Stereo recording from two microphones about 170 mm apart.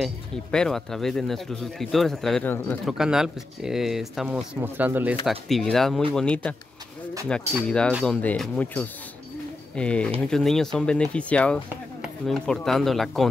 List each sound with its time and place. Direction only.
0.0 s speech: 5° left (ahead or behind)
2.9 s speech: 5° right (ahead or behind)
5.2 s speech: centre (ahead or behind)